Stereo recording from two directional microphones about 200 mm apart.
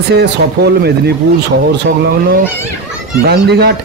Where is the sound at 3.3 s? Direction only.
55° right (ahead or behind).